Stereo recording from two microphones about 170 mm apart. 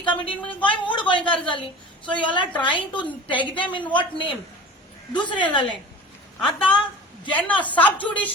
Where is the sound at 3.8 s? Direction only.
10° left (ahead or behind).